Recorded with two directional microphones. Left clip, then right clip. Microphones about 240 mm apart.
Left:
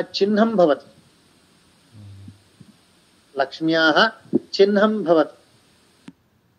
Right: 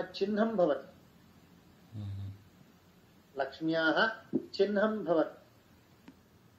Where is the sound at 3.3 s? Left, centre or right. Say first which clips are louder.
Left 12 dB; left.